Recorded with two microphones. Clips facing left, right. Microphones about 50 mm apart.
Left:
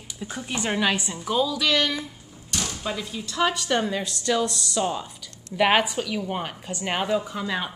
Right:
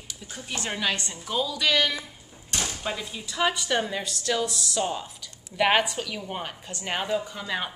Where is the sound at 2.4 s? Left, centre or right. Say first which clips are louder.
Left 1 dB; right.